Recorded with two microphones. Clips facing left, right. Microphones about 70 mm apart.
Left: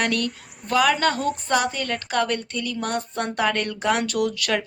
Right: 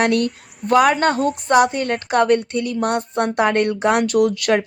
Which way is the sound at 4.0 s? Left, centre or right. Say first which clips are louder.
Right 7 dB; centre.